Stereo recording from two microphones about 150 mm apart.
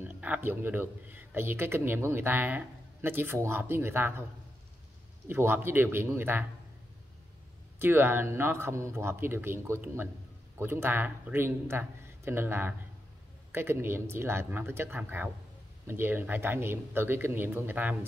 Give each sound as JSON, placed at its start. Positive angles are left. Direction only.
{"t": 0.0, "sound": "speech", "side_deg": -10}
{"t": 5.3, "sound": "speech", "side_deg": -15}
{"t": 7.8, "sound": "speech", "side_deg": -15}